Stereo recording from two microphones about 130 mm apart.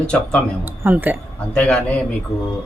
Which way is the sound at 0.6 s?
15° right (ahead or behind).